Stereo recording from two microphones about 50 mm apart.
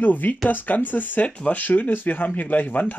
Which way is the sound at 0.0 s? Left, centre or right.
Left.